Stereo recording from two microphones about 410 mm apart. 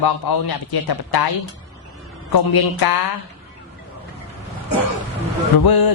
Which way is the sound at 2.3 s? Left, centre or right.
Left.